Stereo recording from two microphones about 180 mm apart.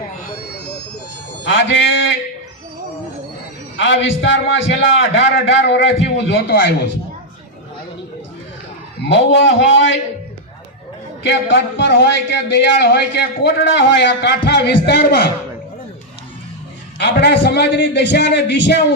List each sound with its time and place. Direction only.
1.5 s music: 90° left
3.8 s a man's voice: 90° left; by 6.7 s 70° left (ahead or behind)
9.1 s a man's voice: 85° left
11.2 s a man's voice: 80° left
17.0 s a man's voice: 65° left (ahead or behind)